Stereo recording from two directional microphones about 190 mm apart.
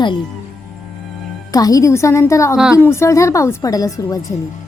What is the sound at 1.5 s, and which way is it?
A woman's voice, 20° left (ahead or behind).